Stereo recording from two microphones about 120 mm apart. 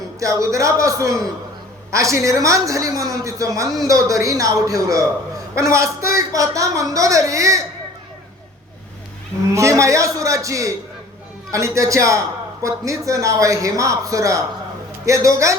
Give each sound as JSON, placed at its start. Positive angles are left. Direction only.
{"t": 0.2, "sound": "speech", "side_deg": -25}
{"t": 9.6, "sound": "speech", "side_deg": -25}